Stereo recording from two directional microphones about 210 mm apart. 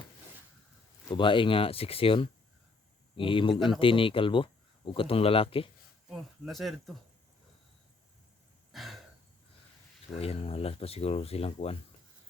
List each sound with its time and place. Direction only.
1.0 s speech: 25° left (ahead or behind)
6.1 s speech: centre (ahead or behind)
8.7 s a sound: centre (ahead or behind)
10.2 s speech: 30° left (ahead or behind)